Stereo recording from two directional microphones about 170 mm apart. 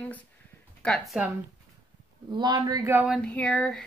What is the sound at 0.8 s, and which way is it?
Speech, centre (ahead or behind).